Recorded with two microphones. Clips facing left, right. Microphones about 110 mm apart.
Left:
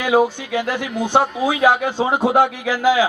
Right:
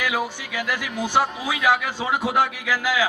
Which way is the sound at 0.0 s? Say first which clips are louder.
Left 9 dB; 25° left (ahead or behind).